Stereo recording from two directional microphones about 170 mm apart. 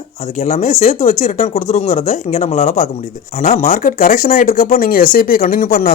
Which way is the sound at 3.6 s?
55° left (ahead or behind).